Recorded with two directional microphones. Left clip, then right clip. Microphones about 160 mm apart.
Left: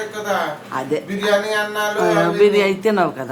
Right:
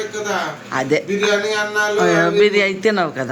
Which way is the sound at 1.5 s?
40° left (ahead or behind).